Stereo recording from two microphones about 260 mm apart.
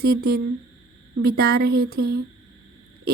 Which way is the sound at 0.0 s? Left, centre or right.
Right.